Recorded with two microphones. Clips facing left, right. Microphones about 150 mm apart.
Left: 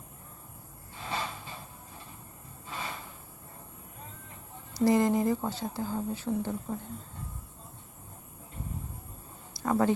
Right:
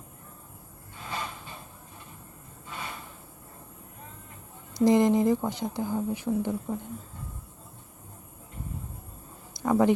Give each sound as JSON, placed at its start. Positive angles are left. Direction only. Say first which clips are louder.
{"t": 1.0, "sound": "gasp", "louder": "left 1 dB", "side_deg": 25}
{"t": 4.8, "sound": "speech", "louder": "right 3 dB", "side_deg": -20}
{"t": 9.6, "sound": "a sound", "louder": "right 4 dB", "side_deg": -15}